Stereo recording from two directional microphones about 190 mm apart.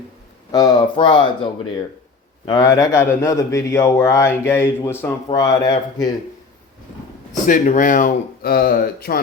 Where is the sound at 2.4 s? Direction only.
20° left (ahead or behind).